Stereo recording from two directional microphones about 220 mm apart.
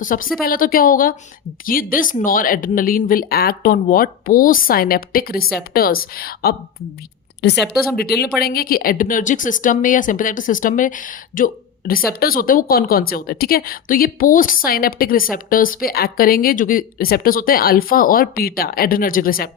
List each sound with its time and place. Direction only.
0.0 s a woman's voice: 40° left (ahead or behind)
7.9 s a woman's voice: 45° left (ahead or behind)